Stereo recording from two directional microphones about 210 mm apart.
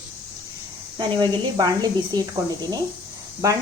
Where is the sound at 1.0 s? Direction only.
20° right (ahead or behind).